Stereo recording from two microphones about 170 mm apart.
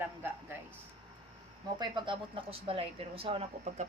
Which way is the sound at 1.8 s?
25° right (ahead or behind).